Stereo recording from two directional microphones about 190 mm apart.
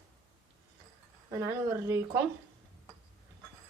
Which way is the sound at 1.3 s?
15° right (ahead or behind).